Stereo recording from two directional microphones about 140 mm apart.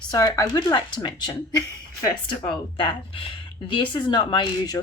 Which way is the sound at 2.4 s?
35° left (ahead or behind).